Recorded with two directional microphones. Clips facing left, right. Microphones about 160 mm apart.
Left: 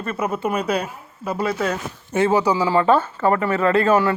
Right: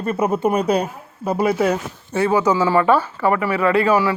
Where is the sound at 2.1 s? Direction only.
20° left (ahead or behind).